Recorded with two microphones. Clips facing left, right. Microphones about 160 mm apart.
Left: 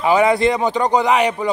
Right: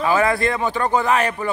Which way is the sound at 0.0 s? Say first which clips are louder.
Left 4 dB; 15° left (ahead or behind).